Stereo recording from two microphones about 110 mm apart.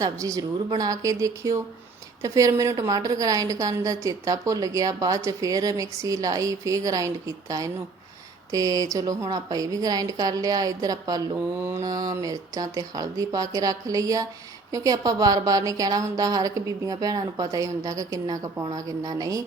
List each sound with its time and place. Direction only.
0.0 s a woman's voice: 30° right (ahead or behind)